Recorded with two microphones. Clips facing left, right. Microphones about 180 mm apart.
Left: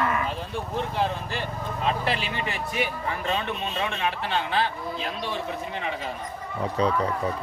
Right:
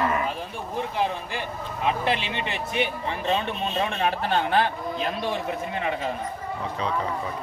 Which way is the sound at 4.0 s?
45° right (ahead or behind).